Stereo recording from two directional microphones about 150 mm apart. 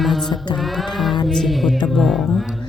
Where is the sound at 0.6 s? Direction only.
Centre (ahead or behind).